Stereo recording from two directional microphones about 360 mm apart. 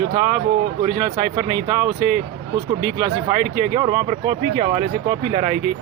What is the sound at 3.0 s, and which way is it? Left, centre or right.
Speech, centre.